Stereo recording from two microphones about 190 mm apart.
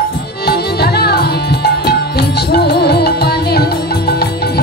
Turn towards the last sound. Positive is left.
turn(degrees=55)  # may be behind; listen again after turning